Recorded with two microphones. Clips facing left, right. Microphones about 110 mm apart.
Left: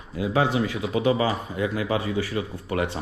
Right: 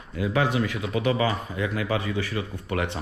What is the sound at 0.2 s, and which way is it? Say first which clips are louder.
Speech: left 1 dB; 25° left (ahead or behind).